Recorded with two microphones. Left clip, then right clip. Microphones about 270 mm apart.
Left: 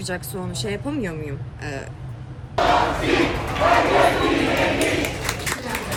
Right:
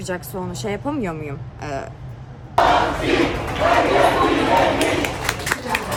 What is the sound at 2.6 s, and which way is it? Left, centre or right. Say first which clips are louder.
Battle cry: right 2 dB; centre.